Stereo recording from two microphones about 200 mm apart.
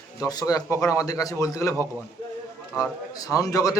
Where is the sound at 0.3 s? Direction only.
20° left (ahead or behind).